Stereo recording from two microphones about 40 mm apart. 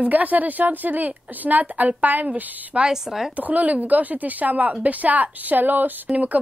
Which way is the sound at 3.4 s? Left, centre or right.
Right.